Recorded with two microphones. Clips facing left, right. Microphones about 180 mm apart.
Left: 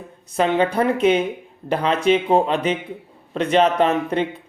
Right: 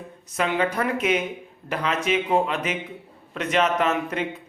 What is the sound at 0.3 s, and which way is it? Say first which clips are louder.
A woman's voice: left 5 dB; 30° left (ahead or behind).